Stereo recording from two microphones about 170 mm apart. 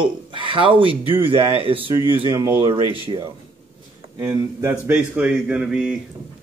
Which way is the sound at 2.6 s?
30° right (ahead or behind).